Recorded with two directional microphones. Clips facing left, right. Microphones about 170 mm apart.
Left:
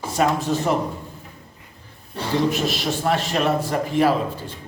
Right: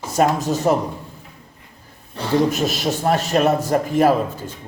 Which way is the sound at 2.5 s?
45° right (ahead or behind).